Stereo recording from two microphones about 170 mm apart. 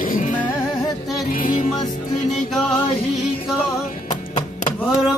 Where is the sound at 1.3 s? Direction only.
50° left (ahead or behind).